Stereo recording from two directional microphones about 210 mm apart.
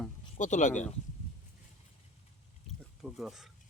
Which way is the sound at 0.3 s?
35° left (ahead or behind).